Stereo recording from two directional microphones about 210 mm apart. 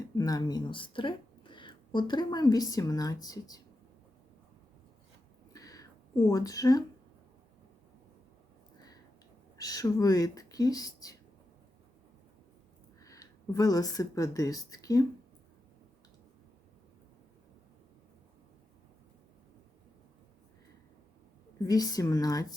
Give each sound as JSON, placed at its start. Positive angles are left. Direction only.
{"t": 0.2, "sound": "speech", "side_deg": 15}
{"t": 5.5, "sound": "a sound", "side_deg": 15}
{"t": 9.6, "sound": "speech", "side_deg": 15}
{"t": 13.0, "sound": "speech", "side_deg": 15}
{"t": 21.7, "sound": "speech", "side_deg": 15}